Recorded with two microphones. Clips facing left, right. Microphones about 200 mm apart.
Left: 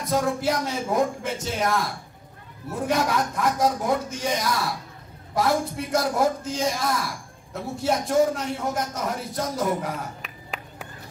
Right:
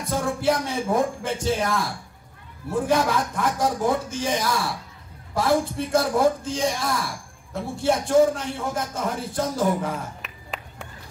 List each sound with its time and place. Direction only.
0.0 s speech: 30° right (ahead or behind)